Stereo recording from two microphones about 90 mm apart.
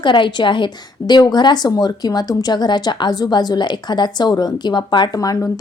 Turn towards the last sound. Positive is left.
turn(degrees=45)  # may be behind; listen again after turning